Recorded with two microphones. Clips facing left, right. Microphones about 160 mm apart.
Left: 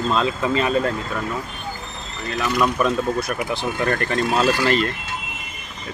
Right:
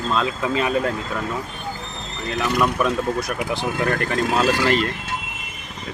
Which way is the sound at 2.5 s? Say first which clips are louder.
Left 1 dB; 10° right (ahead or behind).